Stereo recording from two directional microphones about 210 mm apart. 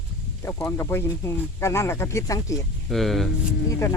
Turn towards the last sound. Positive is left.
turn(degrees=15)  # may be behind; listen again after turning